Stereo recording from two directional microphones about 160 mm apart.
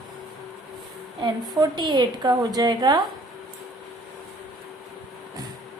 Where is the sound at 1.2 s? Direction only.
25° right (ahead or behind).